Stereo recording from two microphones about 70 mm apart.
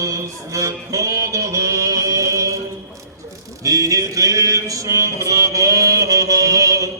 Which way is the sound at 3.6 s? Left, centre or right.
Right.